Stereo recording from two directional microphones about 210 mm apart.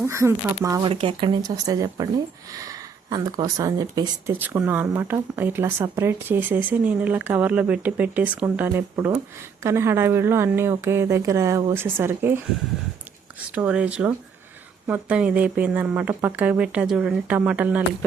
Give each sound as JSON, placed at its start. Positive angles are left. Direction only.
{"t": 0.0, "sound": "speech", "side_deg": -10}
{"t": 13.5, "sound": "speech", "side_deg": -5}